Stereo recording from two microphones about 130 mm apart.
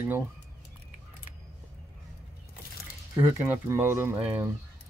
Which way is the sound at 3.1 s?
15° right (ahead or behind).